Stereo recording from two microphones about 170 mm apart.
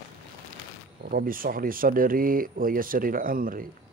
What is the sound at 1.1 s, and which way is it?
Speech, 55° right (ahead or behind).